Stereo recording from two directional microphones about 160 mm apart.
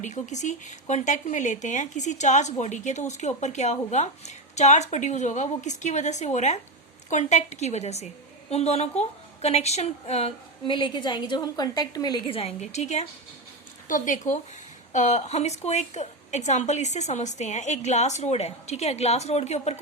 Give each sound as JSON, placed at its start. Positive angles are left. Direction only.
{"t": 0.0, "sound": "a woman's voice", "side_deg": 50}
{"t": 13.8, "sound": "a woman's voice", "side_deg": 55}